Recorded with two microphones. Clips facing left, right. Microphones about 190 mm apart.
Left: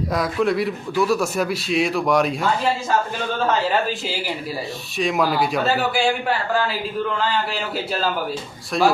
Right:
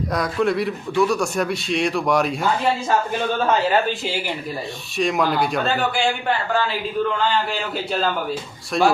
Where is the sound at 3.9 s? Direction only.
5° left (ahead or behind).